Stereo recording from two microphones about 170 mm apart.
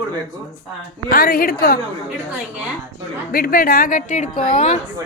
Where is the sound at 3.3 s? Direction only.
60° left (ahead or behind); by 4.8 s 35° left (ahead or behind).